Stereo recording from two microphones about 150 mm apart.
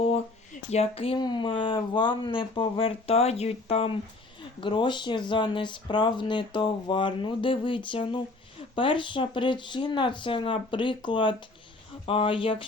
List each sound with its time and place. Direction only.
0.7 s speech: 40° left (ahead or behind)